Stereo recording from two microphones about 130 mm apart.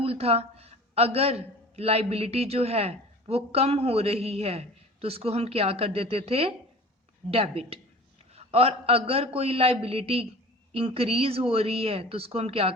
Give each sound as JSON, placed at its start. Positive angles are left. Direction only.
{"t": 0.0, "sound": "a man's voice", "side_deg": -50}